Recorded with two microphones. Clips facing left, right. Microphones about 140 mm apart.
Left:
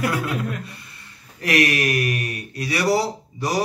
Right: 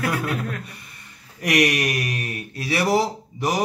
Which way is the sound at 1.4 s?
15° right (ahead or behind).